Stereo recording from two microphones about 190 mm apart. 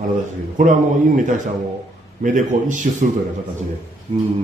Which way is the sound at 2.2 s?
45° right (ahead or behind).